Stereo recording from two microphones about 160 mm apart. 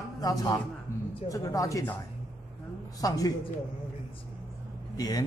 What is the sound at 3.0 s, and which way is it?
Speech, 20° left (ahead or behind).